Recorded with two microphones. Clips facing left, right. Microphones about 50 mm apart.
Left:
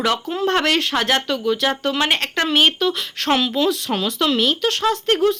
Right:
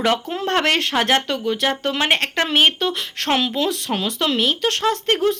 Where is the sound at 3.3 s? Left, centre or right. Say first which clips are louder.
Left 2 dB; centre; by 5.2 s right.